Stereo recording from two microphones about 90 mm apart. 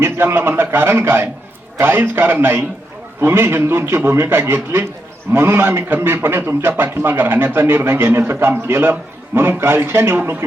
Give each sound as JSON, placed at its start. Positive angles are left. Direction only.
{"t": 0.0, "sound": "a man's voice", "side_deg": -25}